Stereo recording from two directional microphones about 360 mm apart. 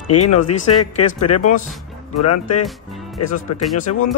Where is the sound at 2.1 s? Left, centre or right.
Left.